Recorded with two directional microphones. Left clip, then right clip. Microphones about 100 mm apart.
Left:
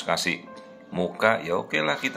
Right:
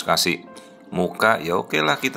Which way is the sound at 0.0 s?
35° right (ahead or behind).